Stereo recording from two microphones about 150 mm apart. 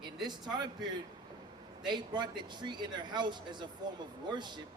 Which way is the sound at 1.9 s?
30° right (ahead or behind).